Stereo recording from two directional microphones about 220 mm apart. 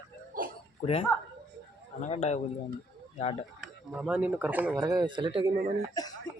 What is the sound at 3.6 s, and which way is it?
Speech, 5° right (ahead or behind).